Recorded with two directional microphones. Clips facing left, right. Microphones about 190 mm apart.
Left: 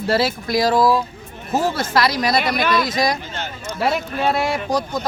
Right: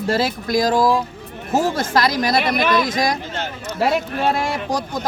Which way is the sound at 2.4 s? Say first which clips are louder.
Right 1 dB; centre (ahead or behind).